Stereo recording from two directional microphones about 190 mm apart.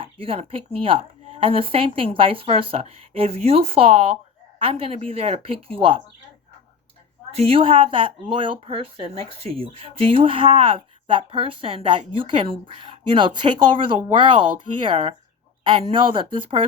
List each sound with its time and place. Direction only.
0.0 s speech: 30° right (ahead or behind)
7.3 s speech: 30° right (ahead or behind)